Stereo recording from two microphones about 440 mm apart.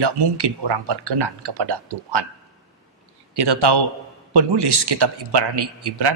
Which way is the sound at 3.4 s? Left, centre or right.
Right.